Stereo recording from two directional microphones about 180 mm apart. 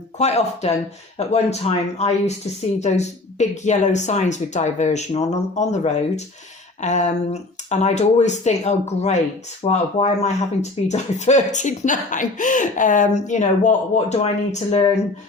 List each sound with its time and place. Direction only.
0.2 s speech: 40° left (ahead or behind)